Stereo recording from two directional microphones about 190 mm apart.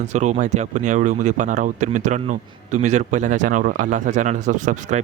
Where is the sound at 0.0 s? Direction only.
35° right (ahead or behind).